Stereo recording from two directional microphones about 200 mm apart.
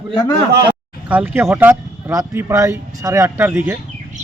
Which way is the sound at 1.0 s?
10° right (ahead or behind).